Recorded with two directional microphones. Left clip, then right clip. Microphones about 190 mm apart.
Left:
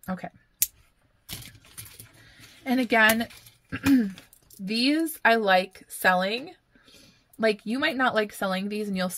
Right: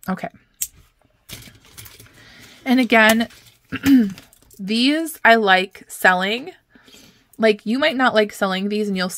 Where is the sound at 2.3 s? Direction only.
35° right (ahead or behind).